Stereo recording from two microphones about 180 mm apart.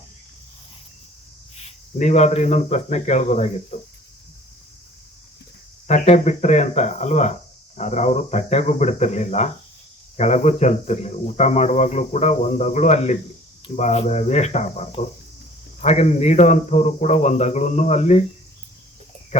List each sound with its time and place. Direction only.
1.6 s speech: 40° left (ahead or behind)
5.9 s speech: 40° left (ahead or behind)
19.3 s speech: 35° left (ahead or behind)